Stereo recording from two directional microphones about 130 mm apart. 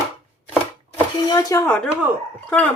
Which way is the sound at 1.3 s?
25° left (ahead or behind).